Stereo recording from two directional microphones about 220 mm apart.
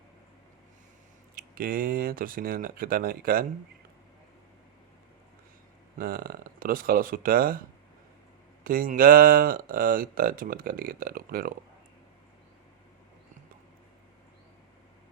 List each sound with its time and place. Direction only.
1.4 s speech: 40° right (ahead or behind)
6.0 s speech: 40° right (ahead or behind)
8.6 s speech: 40° right (ahead or behind)